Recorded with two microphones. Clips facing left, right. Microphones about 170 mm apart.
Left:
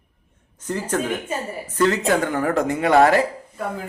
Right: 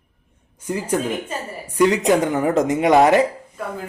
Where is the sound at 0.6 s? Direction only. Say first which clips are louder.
Right 2 dB; 10° right (ahead or behind).